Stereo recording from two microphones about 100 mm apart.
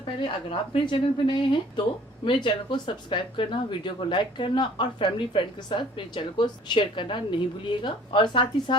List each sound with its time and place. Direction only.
0.7 s speech: 55° left (ahead or behind)